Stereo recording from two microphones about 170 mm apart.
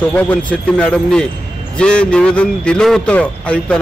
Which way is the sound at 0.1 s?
10° left (ahead or behind).